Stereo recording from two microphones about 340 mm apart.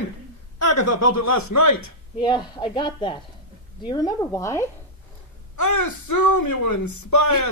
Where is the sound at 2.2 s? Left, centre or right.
Centre.